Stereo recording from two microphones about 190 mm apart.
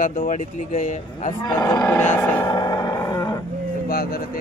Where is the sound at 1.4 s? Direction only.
20° left (ahead or behind).